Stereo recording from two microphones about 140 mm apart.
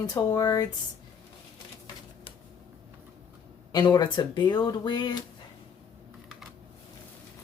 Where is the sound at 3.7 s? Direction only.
30° left (ahead or behind).